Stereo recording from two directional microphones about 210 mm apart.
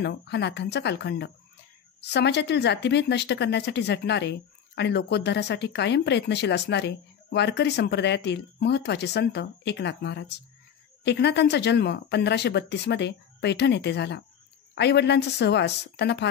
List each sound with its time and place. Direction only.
0.0 s speech: 55° left (ahead or behind)